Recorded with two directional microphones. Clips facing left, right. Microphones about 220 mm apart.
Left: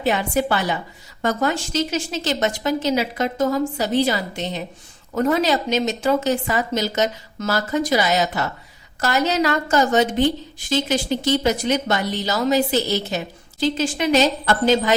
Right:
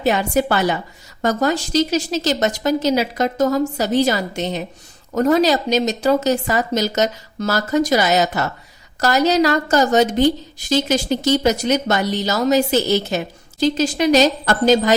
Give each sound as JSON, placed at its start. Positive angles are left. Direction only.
{"t": 0.0, "sound": "a woman's voice", "side_deg": -40}